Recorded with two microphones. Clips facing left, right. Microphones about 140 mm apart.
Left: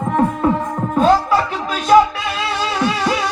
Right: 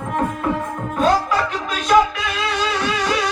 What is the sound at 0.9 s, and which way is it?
Music, 30° left (ahead or behind).